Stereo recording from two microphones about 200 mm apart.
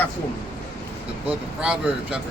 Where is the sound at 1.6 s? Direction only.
5° right (ahead or behind).